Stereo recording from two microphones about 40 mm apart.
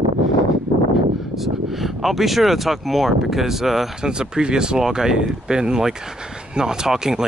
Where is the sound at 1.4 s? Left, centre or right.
Centre.